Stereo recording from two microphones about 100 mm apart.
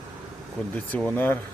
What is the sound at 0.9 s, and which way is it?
Speech, 15° left (ahead or behind).